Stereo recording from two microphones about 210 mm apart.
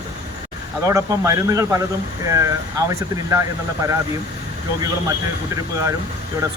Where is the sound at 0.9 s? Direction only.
15° right (ahead or behind).